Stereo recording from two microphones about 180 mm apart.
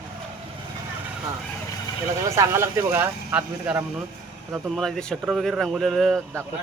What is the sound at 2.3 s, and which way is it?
Speech, 15° right (ahead or behind).